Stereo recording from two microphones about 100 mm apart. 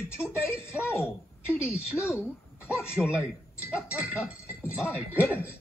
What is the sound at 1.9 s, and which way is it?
Speech, 15° right (ahead or behind).